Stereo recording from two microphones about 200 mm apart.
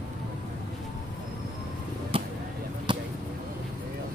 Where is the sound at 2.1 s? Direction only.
25° right (ahead or behind).